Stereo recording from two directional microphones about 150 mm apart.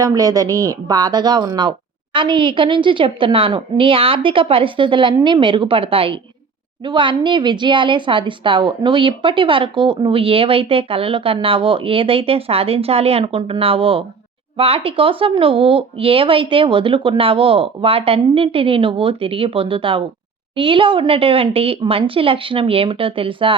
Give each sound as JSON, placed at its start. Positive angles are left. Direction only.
{"t": 0.0, "sound": "a woman's voice", "side_deg": -25}